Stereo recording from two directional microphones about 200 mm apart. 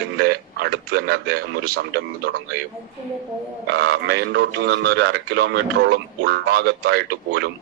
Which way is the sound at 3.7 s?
55° right (ahead or behind).